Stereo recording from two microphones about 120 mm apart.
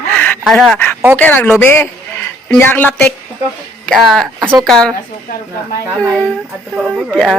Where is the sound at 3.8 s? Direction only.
5° left (ahead or behind).